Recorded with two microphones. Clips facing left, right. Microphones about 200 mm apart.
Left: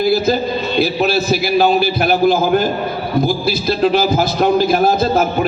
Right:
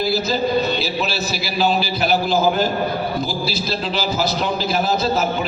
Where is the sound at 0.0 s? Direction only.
55° left (ahead or behind).